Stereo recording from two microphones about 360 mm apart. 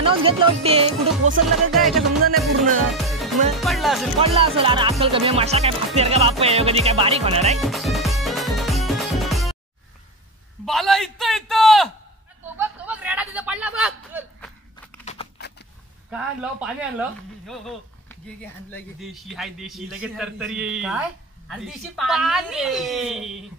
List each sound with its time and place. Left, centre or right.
0.0 s speech: centre
1.7 s speech: centre
2.3 s music: centre
3.5 s speech: centre
4.2 s speech: centre
7.6 s music: centre
10.6 s a sound: centre
16.1 s speech: centre